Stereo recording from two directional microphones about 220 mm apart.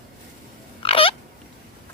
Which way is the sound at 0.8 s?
25° left (ahead or behind).